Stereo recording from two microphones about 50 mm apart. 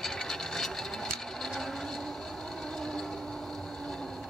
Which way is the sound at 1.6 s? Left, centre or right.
Centre.